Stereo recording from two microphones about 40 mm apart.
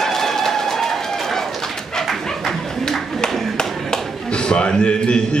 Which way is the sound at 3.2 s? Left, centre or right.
Centre.